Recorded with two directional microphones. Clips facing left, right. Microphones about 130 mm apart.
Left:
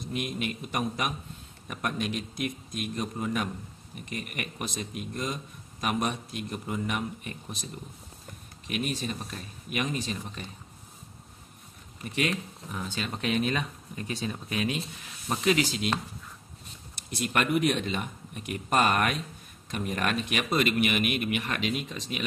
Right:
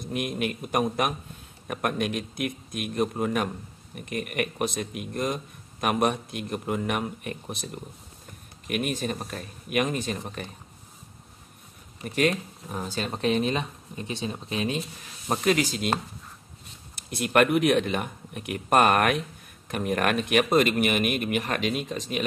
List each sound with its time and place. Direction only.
0.1 s speech: 50° right (ahead or behind)
12.2 s speech: 40° right (ahead or behind)
15.2 s speech: 45° right (ahead or behind)
17.1 s speech: 55° right (ahead or behind)